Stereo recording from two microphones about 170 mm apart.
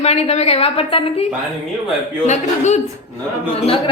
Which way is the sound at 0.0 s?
40° left (ahead or behind).